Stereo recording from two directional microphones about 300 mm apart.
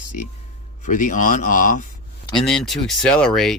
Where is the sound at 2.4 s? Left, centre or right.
Centre.